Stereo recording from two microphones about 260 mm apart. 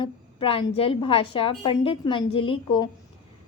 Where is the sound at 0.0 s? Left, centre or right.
Centre.